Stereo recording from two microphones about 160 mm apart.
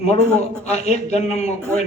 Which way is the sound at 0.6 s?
45° left (ahead or behind).